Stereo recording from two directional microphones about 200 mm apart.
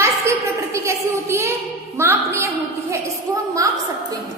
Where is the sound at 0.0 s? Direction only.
15° right (ahead or behind).